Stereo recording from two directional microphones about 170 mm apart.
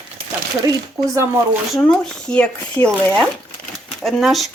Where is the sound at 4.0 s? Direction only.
Centre (ahead or behind).